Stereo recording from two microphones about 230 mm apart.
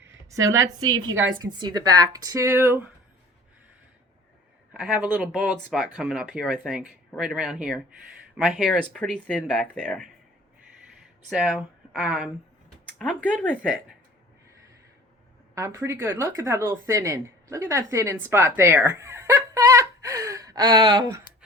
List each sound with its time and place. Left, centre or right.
0.0 s a sound: centre
0.6 s speech: centre
4.7 s speech: centre
11.3 s speech: centre
15.5 s a woman's voice: centre